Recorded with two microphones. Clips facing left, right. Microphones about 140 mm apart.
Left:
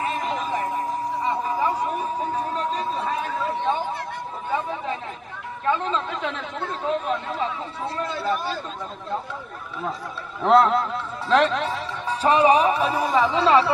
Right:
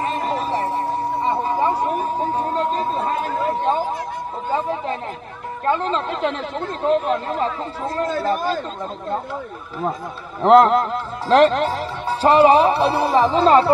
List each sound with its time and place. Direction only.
0.0 s a sound: 35° right (ahead or behind)
2.1 s chatter: 30° right (ahead or behind)
5.7 s speech: 35° right (ahead or behind)
10.4 s speech: 40° right (ahead or behind)